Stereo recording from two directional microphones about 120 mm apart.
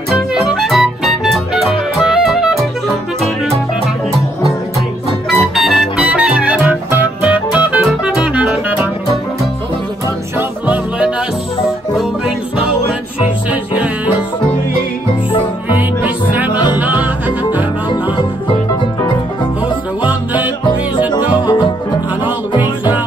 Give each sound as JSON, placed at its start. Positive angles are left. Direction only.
{"t": 0.1, "sound": "music", "side_deg": -5}
{"t": 5.3, "sound": "music", "side_deg": 0}
{"t": 15.7, "sound": "music", "side_deg": -15}
{"t": 20.0, "sound": "music", "side_deg": -15}
{"t": 21.1, "sound": "music", "side_deg": 40}